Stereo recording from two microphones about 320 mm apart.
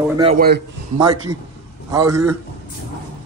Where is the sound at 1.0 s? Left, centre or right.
Centre.